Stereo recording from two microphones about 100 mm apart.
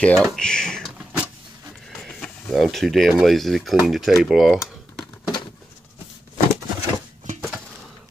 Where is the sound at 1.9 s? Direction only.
10° left (ahead or behind).